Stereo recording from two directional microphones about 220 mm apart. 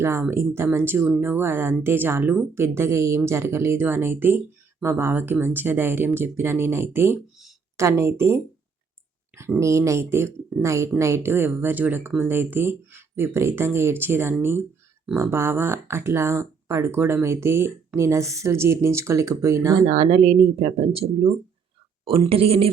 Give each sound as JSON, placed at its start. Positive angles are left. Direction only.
{"t": 0.0, "sound": "speech", "side_deg": -10}
{"t": 9.3, "sound": "speech", "side_deg": -10}
{"t": 19.9, "sound": "speech", "side_deg": -25}